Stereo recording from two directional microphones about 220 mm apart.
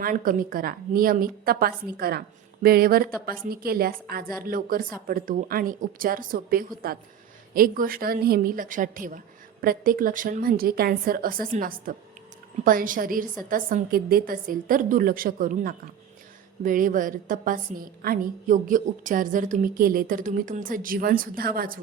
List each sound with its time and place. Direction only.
0.0 s a woman's voice: 40° right (ahead or behind)